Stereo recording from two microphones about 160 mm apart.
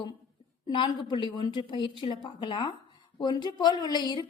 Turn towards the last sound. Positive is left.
turn(degrees=25)  # may be behind; listen again after turning